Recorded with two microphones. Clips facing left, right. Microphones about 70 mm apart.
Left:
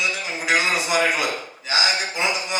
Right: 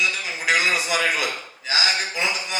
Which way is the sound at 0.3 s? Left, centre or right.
Left.